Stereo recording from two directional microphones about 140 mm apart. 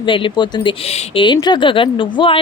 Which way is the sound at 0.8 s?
45° left (ahead or behind).